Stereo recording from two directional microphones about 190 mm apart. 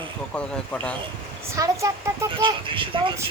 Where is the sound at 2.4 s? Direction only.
25° right (ahead or behind).